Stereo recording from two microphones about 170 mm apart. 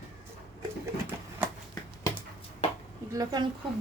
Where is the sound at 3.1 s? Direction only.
25° right (ahead or behind).